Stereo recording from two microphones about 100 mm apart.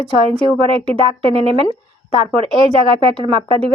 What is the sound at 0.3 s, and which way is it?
A woman's voice, 70° right (ahead or behind).